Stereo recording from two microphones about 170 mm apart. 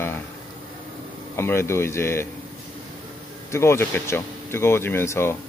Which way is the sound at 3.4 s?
15° left (ahead or behind).